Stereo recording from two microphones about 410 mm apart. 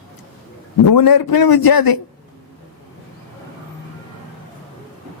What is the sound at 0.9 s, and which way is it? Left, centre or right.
A man's voice, left.